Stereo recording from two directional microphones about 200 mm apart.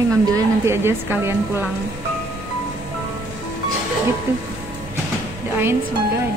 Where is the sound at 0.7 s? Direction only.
10° right (ahead or behind).